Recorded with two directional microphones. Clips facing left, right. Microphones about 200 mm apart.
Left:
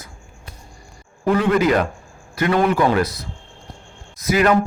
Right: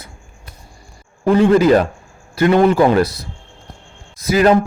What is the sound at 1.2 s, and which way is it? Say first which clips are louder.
A man's voice: right 5 dB; 30° right (ahead or behind).